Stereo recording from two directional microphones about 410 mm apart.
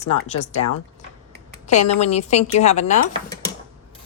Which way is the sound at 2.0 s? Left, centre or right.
Centre.